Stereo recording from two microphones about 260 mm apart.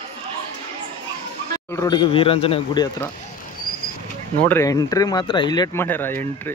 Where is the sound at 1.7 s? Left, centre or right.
Centre.